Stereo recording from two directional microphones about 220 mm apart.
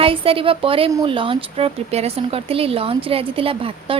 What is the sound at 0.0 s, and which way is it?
Speech, 25° right (ahead or behind).